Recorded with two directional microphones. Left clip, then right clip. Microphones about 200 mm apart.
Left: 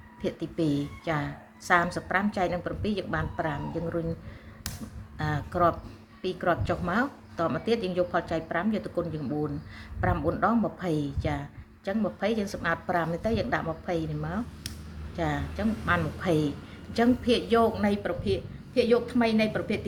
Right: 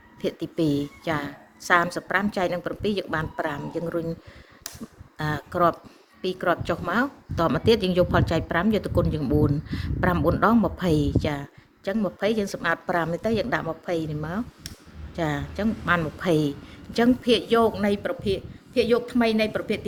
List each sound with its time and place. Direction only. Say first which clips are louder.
0.2 s a woman's voice: right 4 dB; 55° right (ahead or behind)
5.1 s a woman's voice: right 3 dB; 55° right (ahead or behind)